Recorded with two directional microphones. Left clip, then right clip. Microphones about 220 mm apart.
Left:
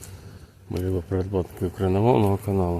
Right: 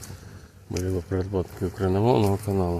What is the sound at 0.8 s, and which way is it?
Speech, 15° left (ahead or behind).